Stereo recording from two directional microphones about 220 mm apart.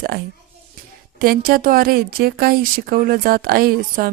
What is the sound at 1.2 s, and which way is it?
A woman's voice, 40° right (ahead or behind).